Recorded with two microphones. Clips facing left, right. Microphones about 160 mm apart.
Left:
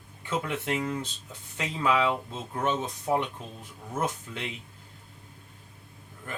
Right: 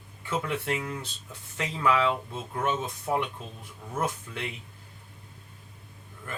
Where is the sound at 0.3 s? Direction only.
20° left (ahead or behind).